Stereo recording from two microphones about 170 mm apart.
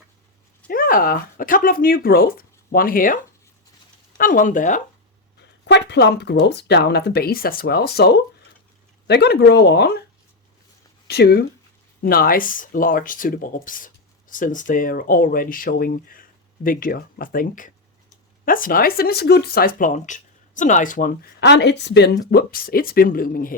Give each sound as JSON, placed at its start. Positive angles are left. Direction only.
{"t": 0.7, "sound": "speech", "side_deg": 55}
{"t": 4.2, "sound": "speech", "side_deg": 50}
{"t": 5.7, "sound": "speech", "side_deg": 85}
{"t": 11.1, "sound": "speech", "side_deg": 70}